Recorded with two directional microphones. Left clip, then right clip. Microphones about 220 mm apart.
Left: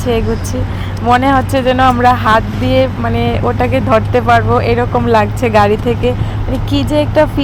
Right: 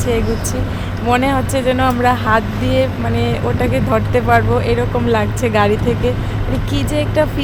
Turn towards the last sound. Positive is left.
turn(degrees=10)  # may be behind; listen again after turning